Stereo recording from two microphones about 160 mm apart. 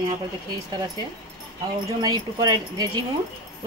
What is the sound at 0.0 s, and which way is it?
A woman's voice, 25° right (ahead or behind).